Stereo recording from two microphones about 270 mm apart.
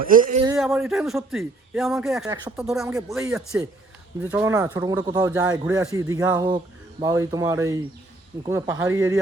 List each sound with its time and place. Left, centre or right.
0.0 s a man's voice: right
0.6 s a man's voice: centre